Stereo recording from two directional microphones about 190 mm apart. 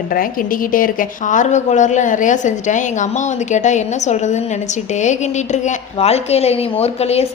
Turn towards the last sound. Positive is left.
turn(degrees=30)  # may be behind; listen again after turning